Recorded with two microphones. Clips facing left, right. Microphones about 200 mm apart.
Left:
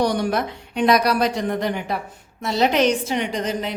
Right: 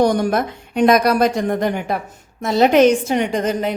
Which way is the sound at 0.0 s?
45° right (ahead or behind).